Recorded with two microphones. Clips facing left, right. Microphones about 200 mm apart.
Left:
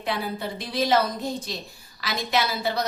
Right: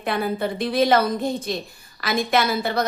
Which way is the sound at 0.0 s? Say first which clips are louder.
Right 5 dB; 55° right (ahead or behind).